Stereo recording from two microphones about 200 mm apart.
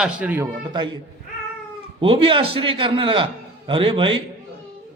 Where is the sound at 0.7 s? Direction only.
20° right (ahead or behind).